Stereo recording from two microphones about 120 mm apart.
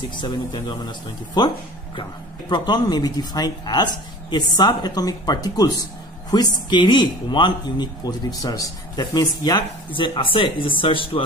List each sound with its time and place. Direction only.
0.1 s speech: 40° left (ahead or behind)
2.5 s speech: 35° left (ahead or behind)